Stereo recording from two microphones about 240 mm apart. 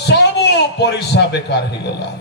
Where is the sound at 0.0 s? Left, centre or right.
Left.